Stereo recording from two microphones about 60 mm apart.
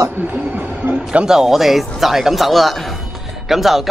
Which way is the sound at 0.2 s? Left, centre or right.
Right.